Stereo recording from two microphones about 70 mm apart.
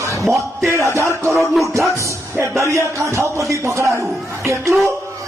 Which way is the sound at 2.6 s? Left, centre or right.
Right.